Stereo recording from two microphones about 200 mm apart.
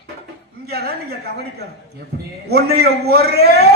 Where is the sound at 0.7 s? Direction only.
55° right (ahead or behind).